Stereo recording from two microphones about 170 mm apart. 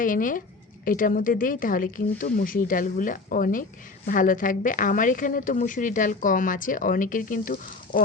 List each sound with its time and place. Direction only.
0.0 s speech: 50° left (ahead or behind)